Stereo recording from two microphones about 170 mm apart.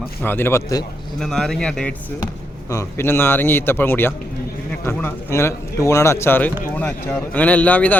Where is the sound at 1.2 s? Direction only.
5° left (ahead or behind).